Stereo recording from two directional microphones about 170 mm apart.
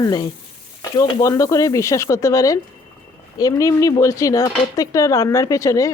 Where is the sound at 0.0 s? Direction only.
25° left (ahead or behind).